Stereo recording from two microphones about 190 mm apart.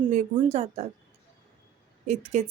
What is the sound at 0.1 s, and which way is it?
Speech, 35° right (ahead or behind).